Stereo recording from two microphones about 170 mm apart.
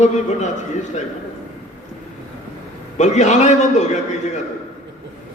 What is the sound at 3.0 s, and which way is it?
Speech, 45° left (ahead or behind).